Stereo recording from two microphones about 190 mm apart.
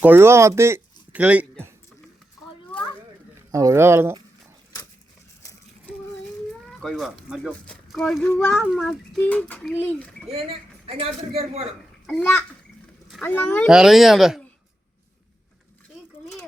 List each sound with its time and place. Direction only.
0.0 s speech: 10° right (ahead or behind)
3.5 s speech: 15° right (ahead or behind)
6.7 s speech: centre (ahead or behind)
8.6 s speech: centre (ahead or behind)
10.2 s a man's voice: 30° right (ahead or behind)
13.1 s speech: 5° left (ahead or behind)
13.7 s speech: 5° right (ahead or behind)